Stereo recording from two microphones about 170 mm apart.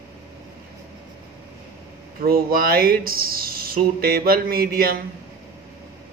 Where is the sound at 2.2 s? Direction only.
60° right (ahead or behind).